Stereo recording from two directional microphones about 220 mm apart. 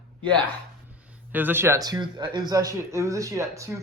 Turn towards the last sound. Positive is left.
turn(degrees=-15)  # may be behind; listen again after turning